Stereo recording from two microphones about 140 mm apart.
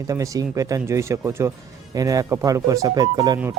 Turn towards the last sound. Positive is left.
turn(degrees=-30)  # may be behind; listen again after turning